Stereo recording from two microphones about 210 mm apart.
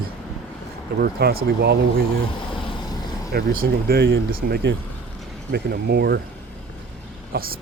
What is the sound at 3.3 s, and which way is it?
Speech, 45° right (ahead or behind).